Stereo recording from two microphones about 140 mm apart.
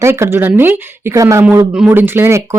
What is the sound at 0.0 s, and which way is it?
Speech, 20° right (ahead or behind).